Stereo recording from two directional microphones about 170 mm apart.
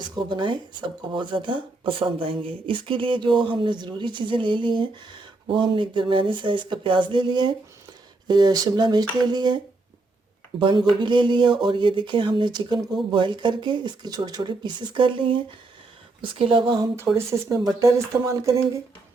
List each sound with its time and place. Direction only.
0.0 s speech: 25° right (ahead or behind)
10.6 s speech: 30° right (ahead or behind)